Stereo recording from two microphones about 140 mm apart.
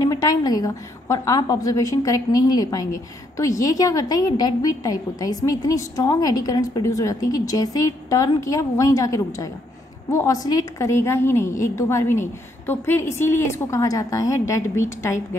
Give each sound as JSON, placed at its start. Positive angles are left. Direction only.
{"t": 0.0, "sound": "a woman's voice", "side_deg": 25}